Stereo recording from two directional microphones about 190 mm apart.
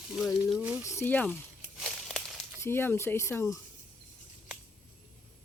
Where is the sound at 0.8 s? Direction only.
15° left (ahead or behind).